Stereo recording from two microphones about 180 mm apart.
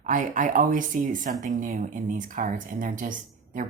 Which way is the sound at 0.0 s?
45° right (ahead or behind).